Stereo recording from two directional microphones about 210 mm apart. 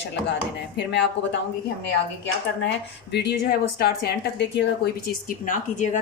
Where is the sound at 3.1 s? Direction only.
50° left (ahead or behind).